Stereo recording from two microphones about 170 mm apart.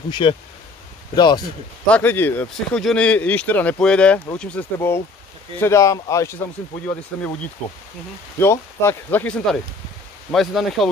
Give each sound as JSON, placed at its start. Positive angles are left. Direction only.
{"t": 0.1, "sound": "speech", "side_deg": 30}
{"t": 1.9, "sound": "speech", "side_deg": 10}
{"t": 8.4, "sound": "speech", "side_deg": 15}